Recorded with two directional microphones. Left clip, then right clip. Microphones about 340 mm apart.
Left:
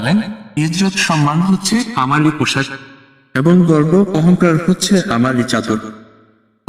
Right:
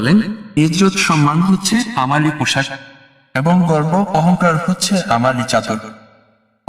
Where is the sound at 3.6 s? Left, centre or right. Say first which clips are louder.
Left 3 dB; centre.